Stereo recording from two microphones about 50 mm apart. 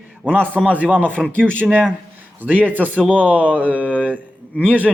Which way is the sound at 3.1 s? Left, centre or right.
Right.